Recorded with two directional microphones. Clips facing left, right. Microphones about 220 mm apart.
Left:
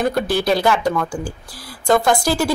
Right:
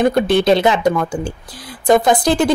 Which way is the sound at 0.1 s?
20° right (ahead or behind).